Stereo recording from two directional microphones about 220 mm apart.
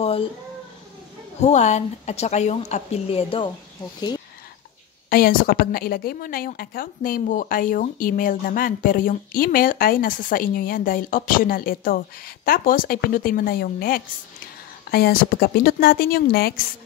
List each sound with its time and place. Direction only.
0.0 s a sound: 25° left (ahead or behind)
1.4 s a woman's voice: 30° left (ahead or behind)
5.1 s a woman's voice: 40° left (ahead or behind)